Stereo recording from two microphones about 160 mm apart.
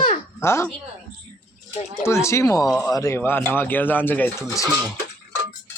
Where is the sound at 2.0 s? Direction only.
15° left (ahead or behind).